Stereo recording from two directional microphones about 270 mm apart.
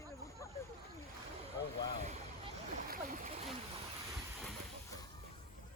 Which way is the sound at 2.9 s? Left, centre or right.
Right.